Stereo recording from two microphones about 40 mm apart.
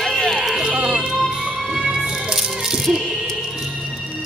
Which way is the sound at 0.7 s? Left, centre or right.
Right.